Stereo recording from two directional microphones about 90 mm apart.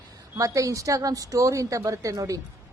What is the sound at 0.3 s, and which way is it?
A woman's voice, 40° right (ahead or behind).